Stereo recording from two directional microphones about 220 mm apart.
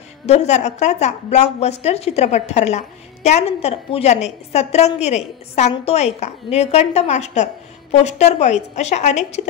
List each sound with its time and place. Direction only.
0.3 s a woman's voice: 30° left (ahead or behind)